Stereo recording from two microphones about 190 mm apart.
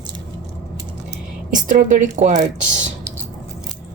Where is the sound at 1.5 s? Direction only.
45° right (ahead or behind).